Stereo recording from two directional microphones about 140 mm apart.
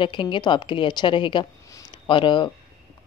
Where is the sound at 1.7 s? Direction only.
35° left (ahead or behind).